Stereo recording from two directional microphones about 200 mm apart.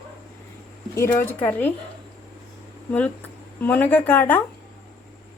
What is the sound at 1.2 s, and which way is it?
Speech, 10° left (ahead or behind).